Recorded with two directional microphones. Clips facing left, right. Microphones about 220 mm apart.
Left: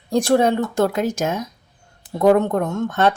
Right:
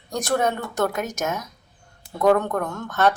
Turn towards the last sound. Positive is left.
turn(degrees=25)  # may be behind; listen again after turning